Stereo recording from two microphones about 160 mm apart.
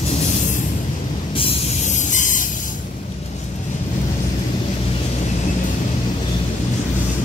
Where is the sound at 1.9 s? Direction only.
55° left (ahead or behind).